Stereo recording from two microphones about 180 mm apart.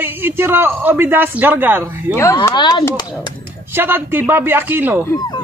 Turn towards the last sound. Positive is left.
turn(degrees=20)  # may be behind; listen again after turning